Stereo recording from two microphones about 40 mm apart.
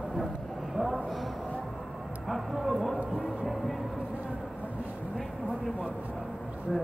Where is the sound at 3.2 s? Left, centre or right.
Centre.